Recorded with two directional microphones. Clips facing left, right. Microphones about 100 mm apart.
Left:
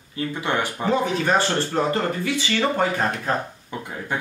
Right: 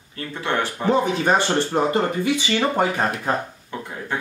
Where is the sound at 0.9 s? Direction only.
20° right (ahead or behind).